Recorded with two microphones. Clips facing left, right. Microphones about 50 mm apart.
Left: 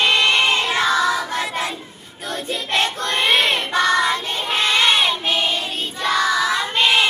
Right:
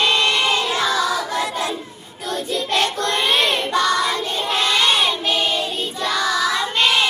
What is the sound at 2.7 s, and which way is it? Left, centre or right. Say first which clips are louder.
Child singing: even; left.